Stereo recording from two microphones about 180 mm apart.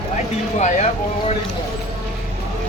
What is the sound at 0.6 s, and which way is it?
Speech, 40° left (ahead or behind).